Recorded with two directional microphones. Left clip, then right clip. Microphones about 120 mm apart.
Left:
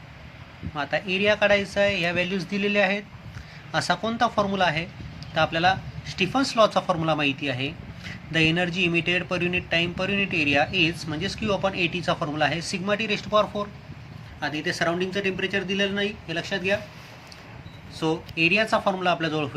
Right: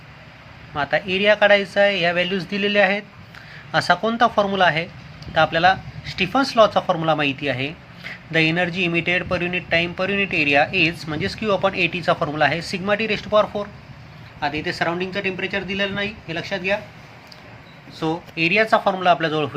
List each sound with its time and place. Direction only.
0.7 s a man's voice: 15° right (ahead or behind)
14.4 s speech: centre (ahead or behind)
18.0 s a man's voice: 5° right (ahead or behind)